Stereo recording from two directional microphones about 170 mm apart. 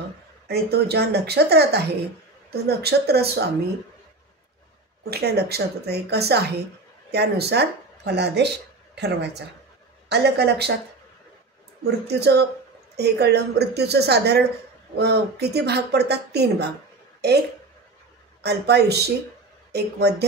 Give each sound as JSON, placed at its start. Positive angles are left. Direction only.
{"t": 0.5, "sound": "speech", "side_deg": -75}
{"t": 5.1, "sound": "speech", "side_deg": -70}
{"t": 11.8, "sound": "speech", "side_deg": -75}
{"t": 18.4, "sound": "speech", "side_deg": -75}